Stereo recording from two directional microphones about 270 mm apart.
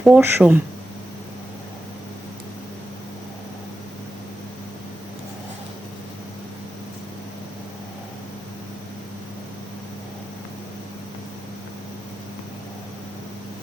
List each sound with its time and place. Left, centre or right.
0.0 s speech: centre